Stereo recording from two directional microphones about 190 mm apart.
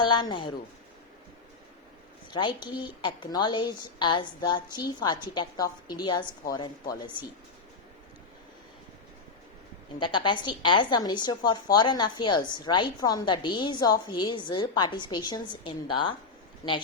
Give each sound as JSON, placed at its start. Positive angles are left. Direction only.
{"t": 0.0, "sound": "a woman's voice", "side_deg": 25}
{"t": 2.3, "sound": "a woman's voice", "side_deg": 25}
{"t": 10.0, "sound": "a woman's voice", "side_deg": 25}